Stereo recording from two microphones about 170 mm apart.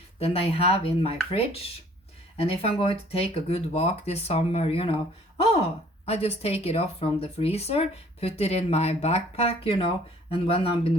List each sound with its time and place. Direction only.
0.2 s speech: 35° left (ahead or behind)
6.1 s speech: 35° left (ahead or behind)